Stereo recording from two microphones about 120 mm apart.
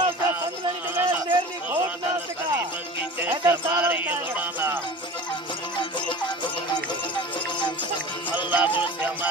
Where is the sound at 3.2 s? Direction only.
15° right (ahead or behind).